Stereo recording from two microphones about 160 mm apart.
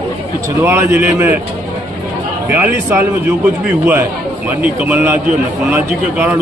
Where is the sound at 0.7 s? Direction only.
10° right (ahead or behind).